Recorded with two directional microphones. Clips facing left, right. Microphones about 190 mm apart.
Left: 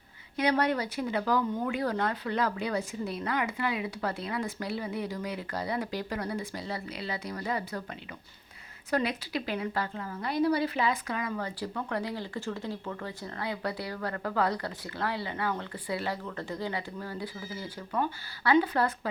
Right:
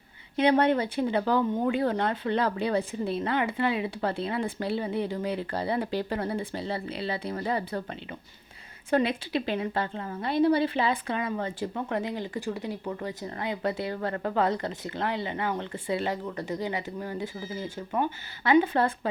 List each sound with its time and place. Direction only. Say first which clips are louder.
0.3 s a woman's voice: right 5 dB; 25° right (ahead or behind)
8.9 s a woman's voice: right 4 dB; 25° right (ahead or behind)